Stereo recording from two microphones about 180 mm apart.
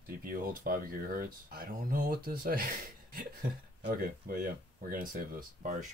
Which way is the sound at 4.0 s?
55° right (ahead or behind).